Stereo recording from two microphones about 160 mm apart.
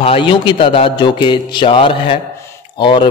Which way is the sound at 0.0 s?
35° left (ahead or behind).